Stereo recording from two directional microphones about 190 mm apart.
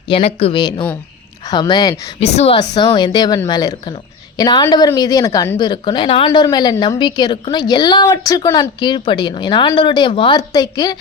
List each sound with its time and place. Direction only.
0.1 s a woman's voice: 35° left (ahead or behind)
2.1 s a woman's voice: 35° left (ahead or behind)
2.6 s a woman's voice: 20° left (ahead or behind)